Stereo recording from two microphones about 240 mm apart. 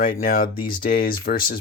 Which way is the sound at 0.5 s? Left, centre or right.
Centre.